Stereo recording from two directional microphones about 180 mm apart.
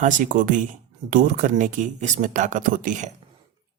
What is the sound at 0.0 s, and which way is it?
Speech, 45° right (ahead or behind).